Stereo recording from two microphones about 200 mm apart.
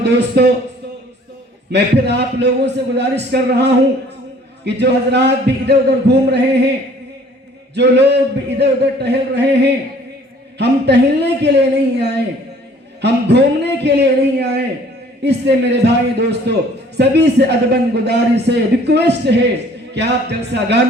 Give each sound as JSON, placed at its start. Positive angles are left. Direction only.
{"t": 0.0, "sound": "a man's voice", "side_deg": -55}
{"t": 1.7, "sound": "a man's voice", "side_deg": -55}
{"t": 7.8, "sound": "a man's voice", "side_deg": -55}